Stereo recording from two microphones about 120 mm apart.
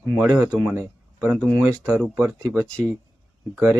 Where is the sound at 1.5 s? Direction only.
25° right (ahead or behind).